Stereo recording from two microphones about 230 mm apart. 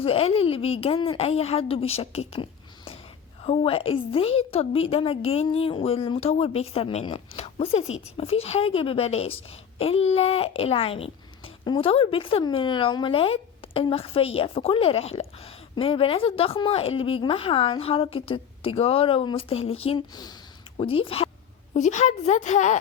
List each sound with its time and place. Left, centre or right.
0.0 s a woman's voice: left